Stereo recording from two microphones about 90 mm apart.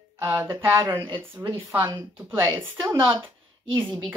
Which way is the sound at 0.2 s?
25° right (ahead or behind).